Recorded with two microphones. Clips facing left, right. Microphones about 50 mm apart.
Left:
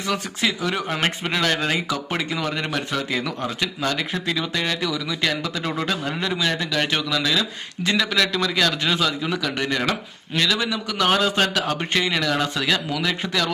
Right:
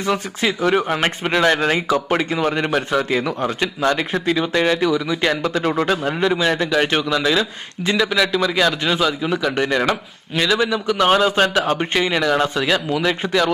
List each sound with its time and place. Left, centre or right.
0.7 s a man's voice: centre
5.1 s a man's voice: centre
7.9 s a man's voice: centre